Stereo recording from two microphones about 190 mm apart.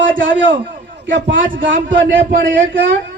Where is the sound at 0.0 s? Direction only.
80° right.